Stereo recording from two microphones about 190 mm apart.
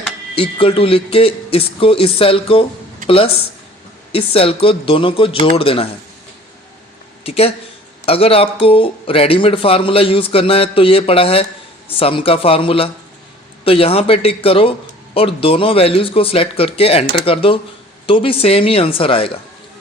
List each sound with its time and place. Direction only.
0.3 s a man's voice: 30° left (ahead or behind)
4.1 s a man's voice: 30° left (ahead or behind)
7.3 s a man's voice: 30° left (ahead or behind)